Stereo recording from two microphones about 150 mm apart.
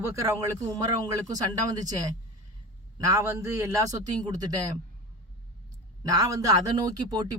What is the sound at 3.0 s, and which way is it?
Speech, 20° right (ahead or behind).